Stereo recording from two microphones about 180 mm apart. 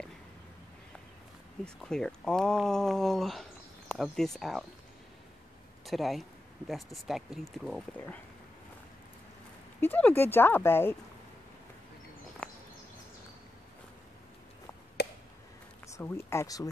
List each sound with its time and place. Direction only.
1.6 s speech: 5° left (ahead or behind)
5.9 s speech: centre (ahead or behind)
9.8 s speech: 10° left (ahead or behind)
12.4 s a sound: 5° left (ahead or behind)
15.0 s a sound: 65° left (ahead or behind)
16.0 s speech: 15° left (ahead or behind)